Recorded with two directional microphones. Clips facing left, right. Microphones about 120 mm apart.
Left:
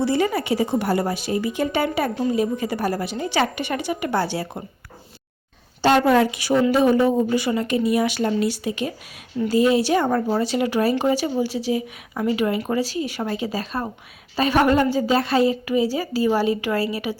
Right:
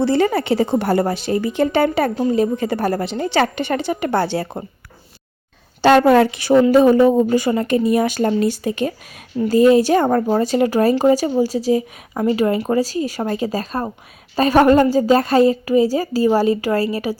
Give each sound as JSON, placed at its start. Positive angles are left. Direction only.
{"t": 0.0, "sound": "a woman's voice", "side_deg": -55}
{"t": 5.8, "sound": "a woman's voice", "side_deg": -65}